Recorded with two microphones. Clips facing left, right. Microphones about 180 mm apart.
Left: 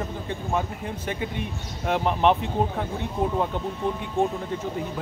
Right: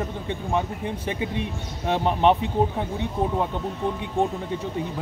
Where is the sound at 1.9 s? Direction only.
30° right (ahead or behind).